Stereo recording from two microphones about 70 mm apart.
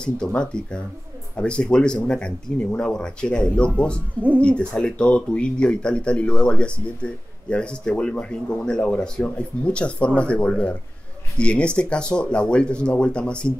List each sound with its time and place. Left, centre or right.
0.0 s speech: centre